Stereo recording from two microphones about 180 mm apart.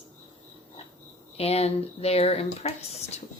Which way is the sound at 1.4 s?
35° left (ahead or behind).